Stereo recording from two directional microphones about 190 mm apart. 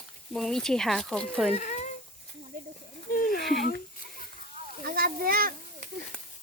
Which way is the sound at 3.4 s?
Centre (ahead or behind).